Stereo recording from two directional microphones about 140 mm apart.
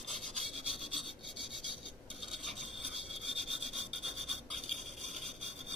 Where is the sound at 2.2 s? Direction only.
Centre (ahead or behind).